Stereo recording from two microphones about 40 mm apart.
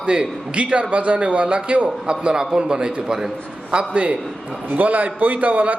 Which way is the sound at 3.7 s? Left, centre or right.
Right.